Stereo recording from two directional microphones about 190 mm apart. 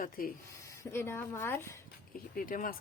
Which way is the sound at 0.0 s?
50° left (ahead or behind).